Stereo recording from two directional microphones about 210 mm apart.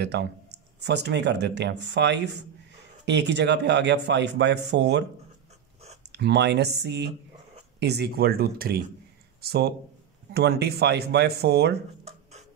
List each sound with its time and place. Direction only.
0.0 s speech: 55° right (ahead or behind)
6.1 s speech: 55° right (ahead or behind)
12.0 s music: 30° right (ahead or behind)